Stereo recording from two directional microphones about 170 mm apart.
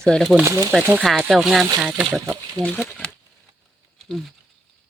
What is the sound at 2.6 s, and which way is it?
Speech, 5° left (ahead or behind).